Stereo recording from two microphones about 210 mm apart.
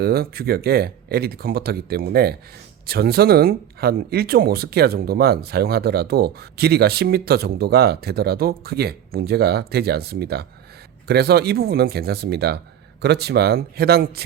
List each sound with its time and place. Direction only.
0.0 s speech: 50° right (ahead or behind)